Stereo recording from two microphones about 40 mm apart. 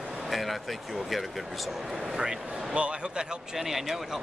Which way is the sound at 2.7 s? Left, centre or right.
Right.